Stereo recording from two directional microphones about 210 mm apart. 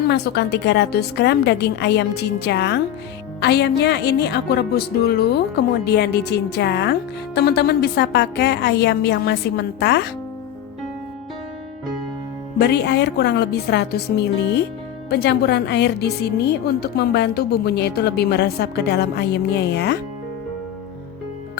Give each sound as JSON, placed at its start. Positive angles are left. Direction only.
{"t": 0.1, "sound": "a woman's voice", "side_deg": 50}
{"t": 12.5, "sound": "a woman's voice", "side_deg": 50}